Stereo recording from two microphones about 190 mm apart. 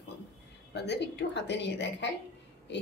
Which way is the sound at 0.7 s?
60° left (ahead or behind).